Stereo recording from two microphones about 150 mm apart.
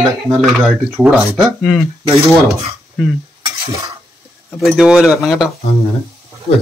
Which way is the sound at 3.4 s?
20° right (ahead or behind).